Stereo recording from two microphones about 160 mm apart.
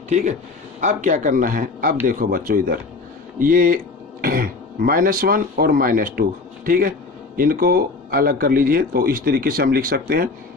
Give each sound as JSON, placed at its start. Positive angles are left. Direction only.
{"t": 0.1, "sound": "a man's voice", "side_deg": -45}